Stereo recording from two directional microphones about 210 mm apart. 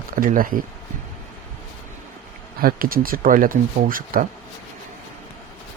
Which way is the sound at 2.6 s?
45° right (ahead or behind).